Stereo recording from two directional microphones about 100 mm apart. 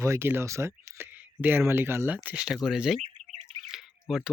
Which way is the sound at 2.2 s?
10° right (ahead or behind).